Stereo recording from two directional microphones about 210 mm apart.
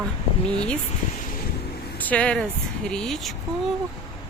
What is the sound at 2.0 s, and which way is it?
Speech, 5° left (ahead or behind).